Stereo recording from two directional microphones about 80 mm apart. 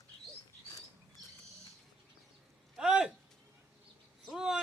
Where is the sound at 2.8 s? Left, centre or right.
Centre.